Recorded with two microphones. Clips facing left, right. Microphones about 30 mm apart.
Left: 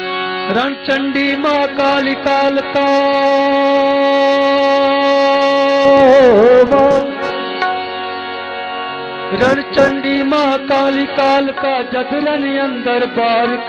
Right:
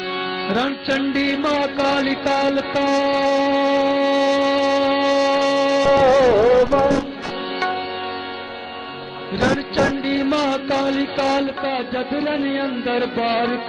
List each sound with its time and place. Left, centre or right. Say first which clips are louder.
0.5 s music: left 5 dB; left
5.0 s shofar: left 6 dB; left
5.9 s music: left 8 dB; left
9.3 s music: left 6 dB; left
10.1 s a sound: left 6 dB; left
11.9 s a man's voice: left 6 dB; centre
12.4 s a sound: left 6 dB; left
12.8 s mantra: left 7 dB; centre